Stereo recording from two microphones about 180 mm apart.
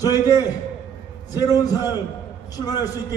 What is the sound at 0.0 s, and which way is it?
A man's voice, 20° left (ahead or behind).